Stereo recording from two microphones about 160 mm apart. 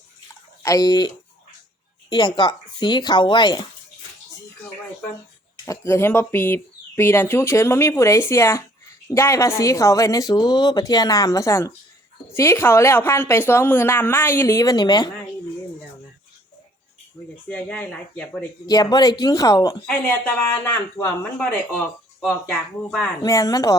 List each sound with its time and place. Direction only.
0.6 s a woman's voice: 25° left (ahead or behind)
5.6 s a woman's voice: 20° left (ahead or behind)
17.5 s speech: 5° left (ahead or behind)
18.6 s a woman's voice: 25° left (ahead or behind)
19.8 s speech: 10° left (ahead or behind)
23.2 s a woman's voice: 20° left (ahead or behind)